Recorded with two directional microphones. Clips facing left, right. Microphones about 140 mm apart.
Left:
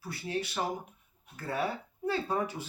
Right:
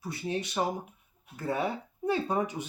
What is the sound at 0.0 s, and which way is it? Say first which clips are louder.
Speech: right 2 dB; 20° right (ahead or behind).